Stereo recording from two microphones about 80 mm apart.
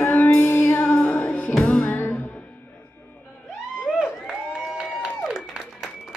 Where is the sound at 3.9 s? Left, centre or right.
Centre.